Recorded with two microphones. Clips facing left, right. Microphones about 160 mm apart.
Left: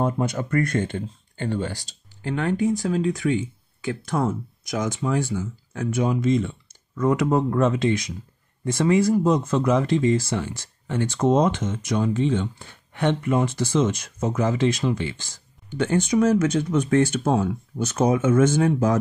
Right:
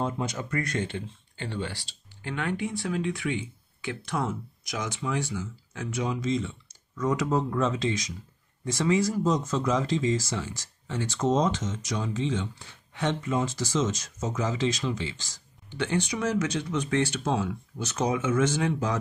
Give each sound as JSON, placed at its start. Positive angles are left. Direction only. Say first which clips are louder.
{"t": 0.0, "sound": "speech", "louder": "left 6 dB", "side_deg": 55}